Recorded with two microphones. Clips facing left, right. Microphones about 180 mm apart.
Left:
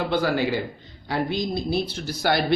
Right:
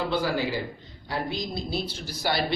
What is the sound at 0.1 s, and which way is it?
A man's voice, 65° left (ahead or behind).